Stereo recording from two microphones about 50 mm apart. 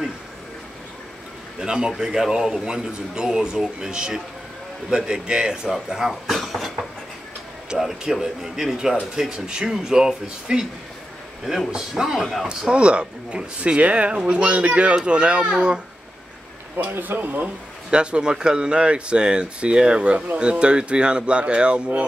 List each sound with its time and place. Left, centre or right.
1.6 s a man's voice: centre
6.2 s vehicle: centre
7.7 s a man's voice: centre
12.4 s speech: centre
16.7 s speech: right
17.9 s speech: centre